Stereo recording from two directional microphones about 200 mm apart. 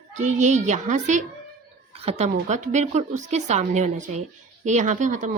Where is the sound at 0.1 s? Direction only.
35° right (ahead or behind).